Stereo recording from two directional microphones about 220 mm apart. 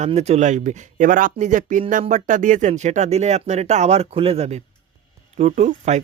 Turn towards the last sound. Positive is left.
turn(degrees=-30)  # may be behind; listen again after turning